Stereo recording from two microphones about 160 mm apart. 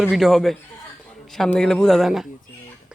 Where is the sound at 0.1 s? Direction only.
Centre (ahead or behind).